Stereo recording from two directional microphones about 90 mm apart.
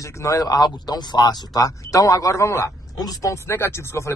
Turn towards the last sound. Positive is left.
turn(degrees=30)  # may be behind; listen again after turning